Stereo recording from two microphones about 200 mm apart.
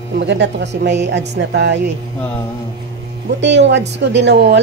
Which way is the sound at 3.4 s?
60° right (ahead or behind).